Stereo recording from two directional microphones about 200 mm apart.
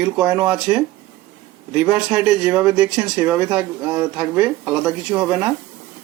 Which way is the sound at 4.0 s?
20° right (ahead or behind).